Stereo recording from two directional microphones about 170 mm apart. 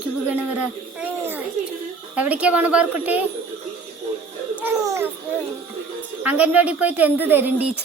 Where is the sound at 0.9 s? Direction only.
10° right (ahead or behind).